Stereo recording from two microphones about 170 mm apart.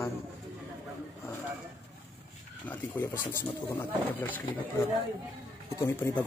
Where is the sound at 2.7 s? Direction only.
15° left (ahead or behind).